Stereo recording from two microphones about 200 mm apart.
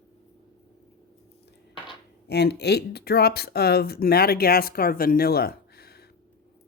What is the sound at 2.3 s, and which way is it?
Speech, 55° left (ahead or behind).